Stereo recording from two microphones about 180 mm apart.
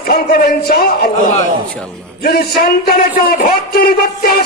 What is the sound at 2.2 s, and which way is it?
A man's voice, 60° left (ahead or behind).